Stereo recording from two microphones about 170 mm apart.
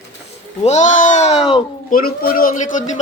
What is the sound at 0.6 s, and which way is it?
Speech, 45° left (ahead or behind).